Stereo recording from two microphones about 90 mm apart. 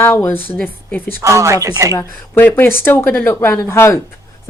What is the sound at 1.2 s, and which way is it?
Speech, 35° right (ahead or behind).